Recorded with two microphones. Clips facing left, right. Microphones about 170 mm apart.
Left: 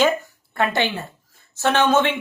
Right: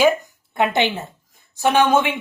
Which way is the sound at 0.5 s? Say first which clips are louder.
Right 2 dB; 20° right (ahead or behind).